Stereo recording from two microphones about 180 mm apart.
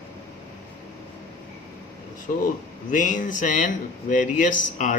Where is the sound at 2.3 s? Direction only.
45° left (ahead or behind).